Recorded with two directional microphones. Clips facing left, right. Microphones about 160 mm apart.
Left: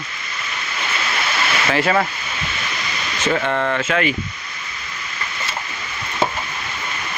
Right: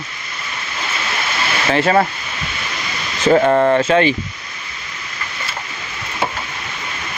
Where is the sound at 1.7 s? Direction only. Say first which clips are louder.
Right 5 dB; 30° right (ahead or behind).